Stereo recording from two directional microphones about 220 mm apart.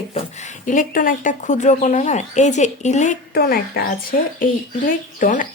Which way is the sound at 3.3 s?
45° left (ahead or behind).